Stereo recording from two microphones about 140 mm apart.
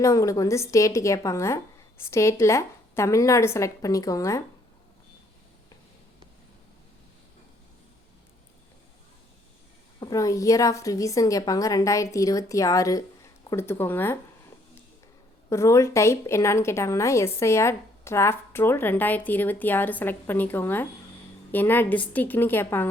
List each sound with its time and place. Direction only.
0.0 s a woman's voice: 25° left (ahead or behind)
10.0 s a woman's voice: 25° left (ahead or behind)
15.4 s a woman's voice: 20° left (ahead or behind)